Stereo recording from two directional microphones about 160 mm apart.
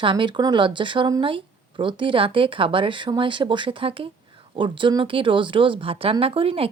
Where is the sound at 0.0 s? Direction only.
30° right (ahead or behind).